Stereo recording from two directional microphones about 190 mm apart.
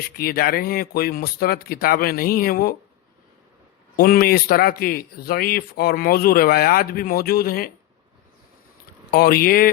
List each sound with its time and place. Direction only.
0.0 s a man's voice: 50° left (ahead or behind)
3.9 s a man's voice: 50° left (ahead or behind)
9.1 s a man's voice: 50° left (ahead or behind)